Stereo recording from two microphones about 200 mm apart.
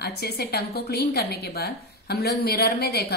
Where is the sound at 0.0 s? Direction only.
55° left (ahead or behind).